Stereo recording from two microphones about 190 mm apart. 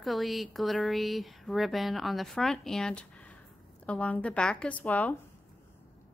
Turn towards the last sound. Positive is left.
turn(degrees=10)  # may be behind; listen again after turning